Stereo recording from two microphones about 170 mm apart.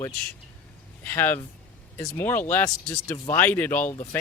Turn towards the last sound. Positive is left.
turn(degrees=10)  # may be behind; listen again after turning